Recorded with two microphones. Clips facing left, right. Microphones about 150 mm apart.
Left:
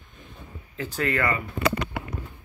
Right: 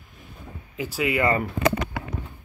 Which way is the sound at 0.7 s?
10° right (ahead or behind).